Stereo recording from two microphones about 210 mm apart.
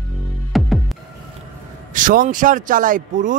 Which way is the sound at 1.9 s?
40° right (ahead or behind).